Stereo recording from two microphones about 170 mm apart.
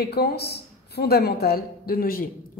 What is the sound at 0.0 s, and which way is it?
A woman's voice, 70° left (ahead or behind).